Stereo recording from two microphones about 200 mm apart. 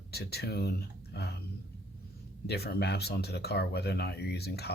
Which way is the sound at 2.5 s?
50° left (ahead or behind).